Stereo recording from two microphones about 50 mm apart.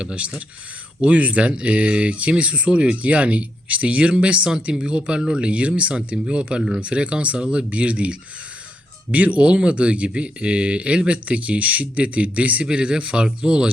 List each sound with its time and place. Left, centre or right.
0.0 s speech: right
9.1 s speech: right